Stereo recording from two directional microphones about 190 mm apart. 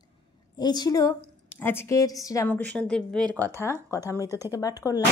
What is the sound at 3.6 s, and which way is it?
A woman's voice, 15° left (ahead or behind).